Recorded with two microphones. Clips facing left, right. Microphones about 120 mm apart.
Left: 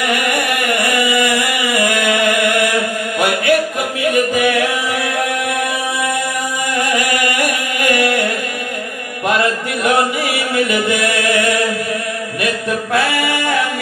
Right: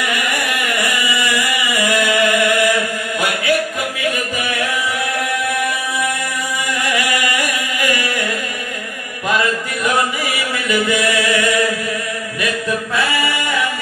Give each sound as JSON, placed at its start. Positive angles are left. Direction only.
{"t": 0.0, "sound": "a sound", "side_deg": 60}
{"t": 3.2, "sound": "chant", "side_deg": 60}
{"t": 4.1, "sound": "music", "side_deg": 60}
{"t": 7.4, "sound": "music", "side_deg": 55}
{"t": 9.8, "sound": "chant", "side_deg": 60}